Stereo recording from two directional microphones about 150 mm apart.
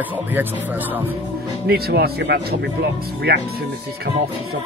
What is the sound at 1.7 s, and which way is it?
Speech, 90° right.